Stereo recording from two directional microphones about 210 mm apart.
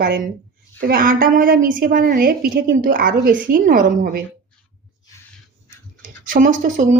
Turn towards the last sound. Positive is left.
turn(degrees=-35)  # may be behind; listen again after turning